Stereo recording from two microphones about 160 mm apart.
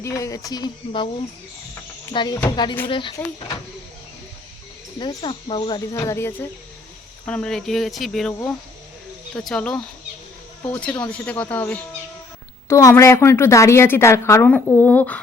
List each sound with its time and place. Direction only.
0.0 s speech: 20° left (ahead or behind)
2.1 s speech: 25° left (ahead or behind)
4.9 s speech: 30° left (ahead or behind); by 8.3 s centre (ahead or behind)
9.3 s a woman's voice: 5° left (ahead or behind)